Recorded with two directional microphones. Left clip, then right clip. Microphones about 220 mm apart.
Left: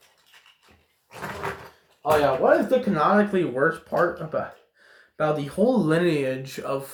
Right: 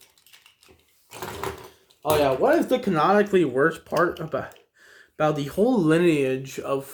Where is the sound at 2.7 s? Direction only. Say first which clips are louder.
Even; 35° right (ahead or behind).